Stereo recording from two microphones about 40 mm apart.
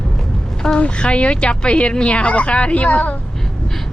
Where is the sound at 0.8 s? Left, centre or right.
Left.